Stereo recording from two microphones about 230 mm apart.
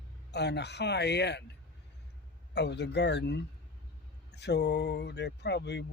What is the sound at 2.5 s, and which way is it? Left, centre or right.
Speech, left.